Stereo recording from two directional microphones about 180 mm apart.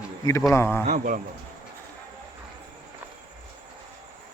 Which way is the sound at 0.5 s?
15° left (ahead or behind).